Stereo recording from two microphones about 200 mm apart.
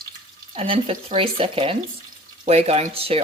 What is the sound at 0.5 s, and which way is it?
Speech, 30° right (ahead or behind).